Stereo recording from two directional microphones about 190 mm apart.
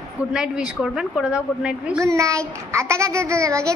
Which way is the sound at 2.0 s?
15° right (ahead or behind).